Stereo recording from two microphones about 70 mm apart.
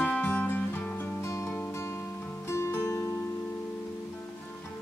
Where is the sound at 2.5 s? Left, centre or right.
Left.